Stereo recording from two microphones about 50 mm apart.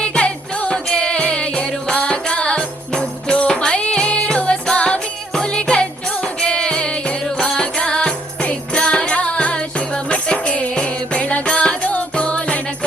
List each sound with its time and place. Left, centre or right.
0.0 s music: centre
7.3 s music: centre